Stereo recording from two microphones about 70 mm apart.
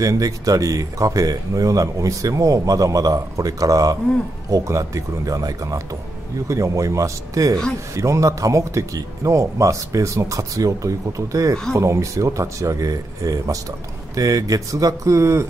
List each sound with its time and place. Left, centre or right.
0.0 s speech: right